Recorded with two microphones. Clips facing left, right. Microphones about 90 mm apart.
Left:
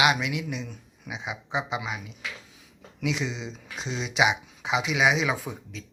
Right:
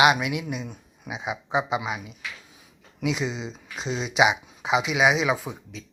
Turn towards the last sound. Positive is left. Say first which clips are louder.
# right 1 dB
turn(degrees=-5)  # may be behind; listen again after turning